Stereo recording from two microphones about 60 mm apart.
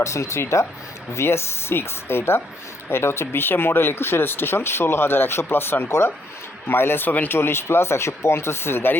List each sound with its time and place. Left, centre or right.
0.0 s speech: left